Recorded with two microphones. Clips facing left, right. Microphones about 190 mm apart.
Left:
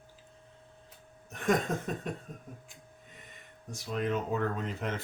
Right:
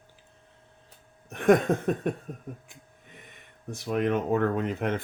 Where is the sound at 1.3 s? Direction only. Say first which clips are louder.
Right 8 dB; 60° right (ahead or behind).